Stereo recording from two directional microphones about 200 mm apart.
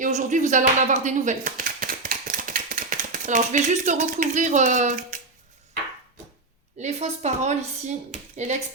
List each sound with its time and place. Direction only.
0.0 s speech: 40° right (ahead or behind)
6.7 s speech: 35° right (ahead or behind)